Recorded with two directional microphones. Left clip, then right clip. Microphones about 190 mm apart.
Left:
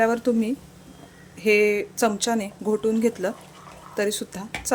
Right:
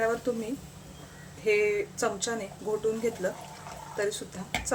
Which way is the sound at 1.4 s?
55° left (ahead or behind).